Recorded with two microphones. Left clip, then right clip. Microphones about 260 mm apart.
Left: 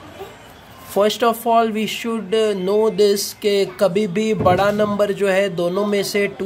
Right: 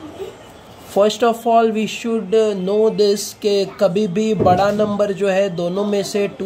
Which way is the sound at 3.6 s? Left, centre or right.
Left.